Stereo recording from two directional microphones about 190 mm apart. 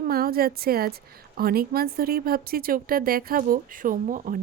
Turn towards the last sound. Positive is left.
turn(degrees=-45)  # may be behind; listen again after turning